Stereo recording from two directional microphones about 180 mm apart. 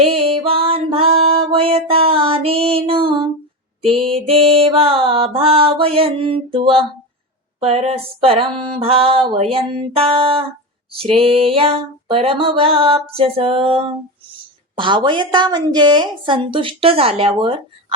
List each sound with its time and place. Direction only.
0.0 s music: 30° right (ahead or behind)
4.0 s mantra: 30° right (ahead or behind)
7.6 s mantra: 35° right (ahead or behind)
14.8 s a woman's voice: 25° right (ahead or behind)